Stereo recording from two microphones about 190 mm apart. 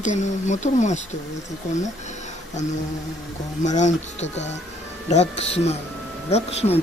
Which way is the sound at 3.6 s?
40° left (ahead or behind).